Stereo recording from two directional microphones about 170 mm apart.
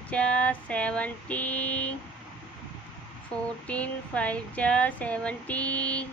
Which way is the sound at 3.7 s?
10° left (ahead or behind).